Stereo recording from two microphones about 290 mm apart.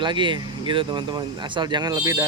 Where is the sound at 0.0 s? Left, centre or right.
Centre.